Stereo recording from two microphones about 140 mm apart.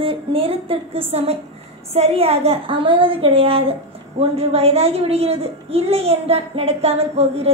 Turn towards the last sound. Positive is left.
turn(degrees=-45)  # may be behind; listen again after turning